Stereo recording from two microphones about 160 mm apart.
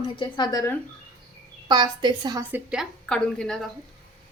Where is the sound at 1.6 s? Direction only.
30° right (ahead or behind).